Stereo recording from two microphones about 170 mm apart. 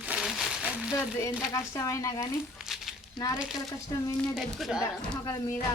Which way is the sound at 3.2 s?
20° left (ahead or behind).